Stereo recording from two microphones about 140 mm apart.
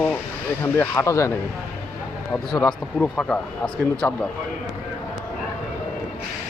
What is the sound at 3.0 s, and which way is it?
Speech, 10° left (ahead or behind).